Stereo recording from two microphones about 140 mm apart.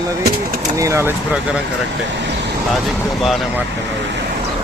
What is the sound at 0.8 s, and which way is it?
Speech, 20° right (ahead or behind).